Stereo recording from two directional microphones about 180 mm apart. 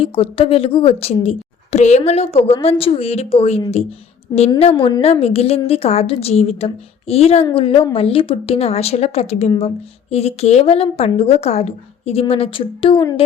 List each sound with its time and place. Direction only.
0.0 s a woman's voice: 30° left (ahead or behind)
4.7 s a woman's voice: 25° left (ahead or behind)